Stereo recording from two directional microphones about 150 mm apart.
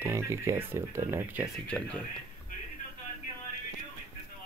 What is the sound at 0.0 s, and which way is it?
Speech, 20° right (ahead or behind).